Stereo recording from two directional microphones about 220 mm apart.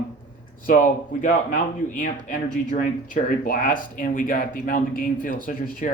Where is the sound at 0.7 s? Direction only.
35° left (ahead or behind).